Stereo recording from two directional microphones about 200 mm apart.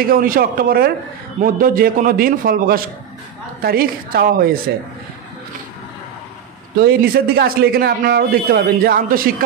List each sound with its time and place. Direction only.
0.1 s a man's voice: 45° right (ahead or behind)
6.8 s a man's voice: 50° right (ahead or behind)